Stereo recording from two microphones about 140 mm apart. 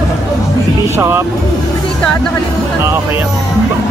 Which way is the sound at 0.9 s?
20° right (ahead or behind).